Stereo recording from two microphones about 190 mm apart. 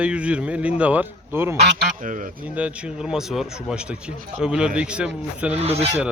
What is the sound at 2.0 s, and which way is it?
Speech, 45° right (ahead or behind).